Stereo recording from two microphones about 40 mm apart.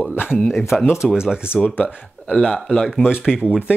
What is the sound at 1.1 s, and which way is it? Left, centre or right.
Speech, right.